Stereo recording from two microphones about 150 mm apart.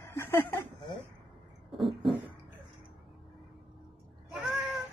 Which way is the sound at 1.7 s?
Centre (ahead or behind).